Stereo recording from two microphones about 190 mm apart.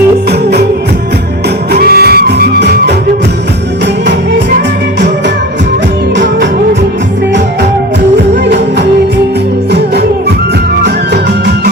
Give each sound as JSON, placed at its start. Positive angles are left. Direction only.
{"t": 1.7, "sound": "music", "side_deg": -55}
{"t": 9.7, "sound": "music", "side_deg": -60}